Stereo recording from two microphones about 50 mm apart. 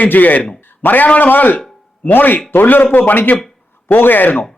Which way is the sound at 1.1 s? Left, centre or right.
Left.